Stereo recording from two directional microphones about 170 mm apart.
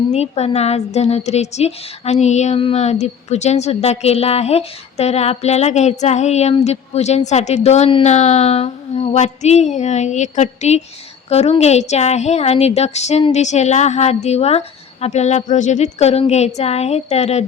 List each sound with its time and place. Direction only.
0.1 s a woman's voice: 40° left (ahead or behind)